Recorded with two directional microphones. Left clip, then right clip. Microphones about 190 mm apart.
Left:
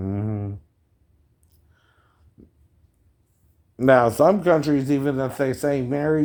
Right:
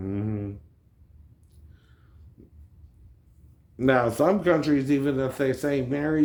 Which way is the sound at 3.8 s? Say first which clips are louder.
Left 6 dB; 55° left (ahead or behind).